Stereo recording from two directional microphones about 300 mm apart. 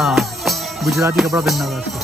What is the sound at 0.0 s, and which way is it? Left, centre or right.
Music, centre.